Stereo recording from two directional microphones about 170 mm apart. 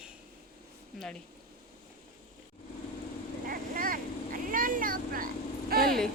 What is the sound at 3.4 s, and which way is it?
Vehicle, 55° right (ahead or behind).